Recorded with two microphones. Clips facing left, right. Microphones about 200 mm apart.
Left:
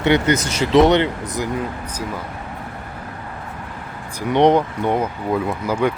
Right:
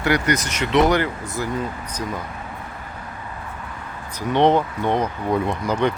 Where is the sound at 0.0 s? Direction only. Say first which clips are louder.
Left 4 dB; 25° left (ahead or behind).